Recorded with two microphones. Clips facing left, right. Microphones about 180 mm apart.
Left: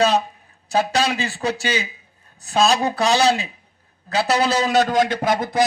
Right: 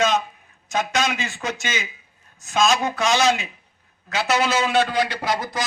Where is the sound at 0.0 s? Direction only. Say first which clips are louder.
Left 3 dB; 35° left (ahead or behind).